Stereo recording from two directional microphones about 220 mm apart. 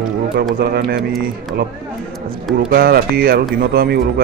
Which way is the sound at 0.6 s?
45° right (ahead or behind).